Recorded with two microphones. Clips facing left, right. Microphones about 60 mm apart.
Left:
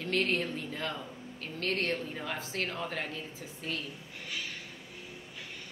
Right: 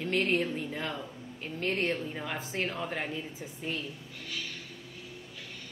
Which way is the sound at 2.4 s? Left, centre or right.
Centre.